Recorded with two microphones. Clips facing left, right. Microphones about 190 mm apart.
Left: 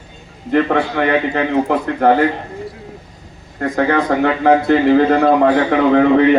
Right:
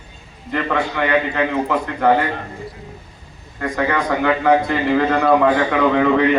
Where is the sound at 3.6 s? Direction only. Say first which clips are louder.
Left 4 dB; 40° left (ahead or behind).